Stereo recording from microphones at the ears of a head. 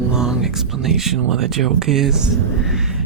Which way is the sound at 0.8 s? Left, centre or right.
Right.